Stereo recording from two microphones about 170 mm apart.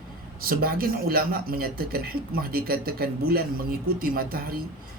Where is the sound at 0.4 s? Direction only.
60° right (ahead or behind).